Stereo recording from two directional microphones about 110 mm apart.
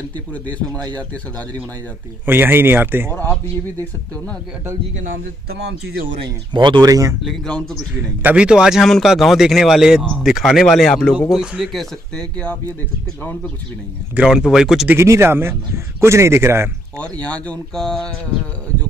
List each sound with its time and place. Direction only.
2.2 s a man's voice: 20° right (ahead or behind)
3.2 s speech: 15° left (ahead or behind)
6.1 s speech: 45° right (ahead or behind)
7.2 s speech: 10° left (ahead or behind)
8.2 s a man's voice: 15° right (ahead or behind); by 12.5 s 10° left (ahead or behind)
14.1 s a man's voice: 5° right (ahead or behind)
14.9 s a man's voice: 25° right (ahead or behind)
17.0 s speech: 10° left (ahead or behind)